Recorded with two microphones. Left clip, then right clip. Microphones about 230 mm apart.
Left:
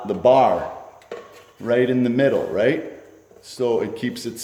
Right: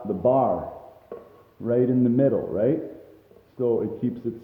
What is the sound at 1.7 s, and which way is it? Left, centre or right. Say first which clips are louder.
A man's voice: left 3 dB; centre.